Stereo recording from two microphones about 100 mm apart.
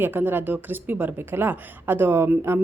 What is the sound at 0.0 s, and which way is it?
A woman's voice, 20° right (ahead or behind).